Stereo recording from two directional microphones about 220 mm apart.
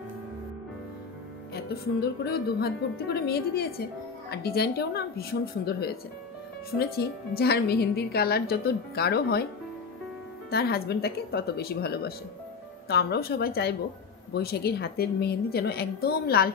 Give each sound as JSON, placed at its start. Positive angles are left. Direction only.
{"t": 1.5, "sound": "a woman's voice", "side_deg": 45}
{"t": 7.0, "sound": "a woman's voice", "side_deg": 45}
{"t": 10.5, "sound": "a woman's voice", "side_deg": 45}